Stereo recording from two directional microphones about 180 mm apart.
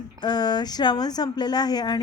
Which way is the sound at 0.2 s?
25° left (ahead or behind).